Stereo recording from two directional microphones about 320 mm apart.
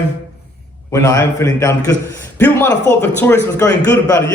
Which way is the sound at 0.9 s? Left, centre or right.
Centre.